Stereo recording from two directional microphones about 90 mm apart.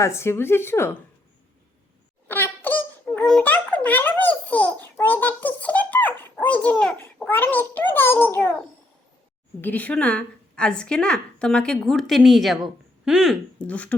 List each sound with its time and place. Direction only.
0.0 s a child's voice: 30° left (ahead or behind)
2.2 s wail: 25° left (ahead or behind)
3.4 s babbling: 15° left (ahead or behind)
6.4 s a child's voice: 15° left (ahead or behind)
9.6 s a woman's voice: 20° left (ahead or behind); by 13.3 s 5° right (ahead or behind)
13.6 s a woman's voice: 15° left (ahead or behind)